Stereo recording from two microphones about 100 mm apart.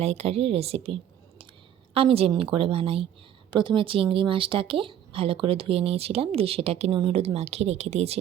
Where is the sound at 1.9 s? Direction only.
75° right (ahead or behind).